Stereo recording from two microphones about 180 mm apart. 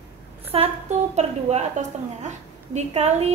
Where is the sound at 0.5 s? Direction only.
30° right (ahead or behind).